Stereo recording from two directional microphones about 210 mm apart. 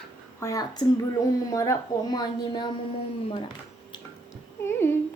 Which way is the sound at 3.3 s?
20° left (ahead or behind).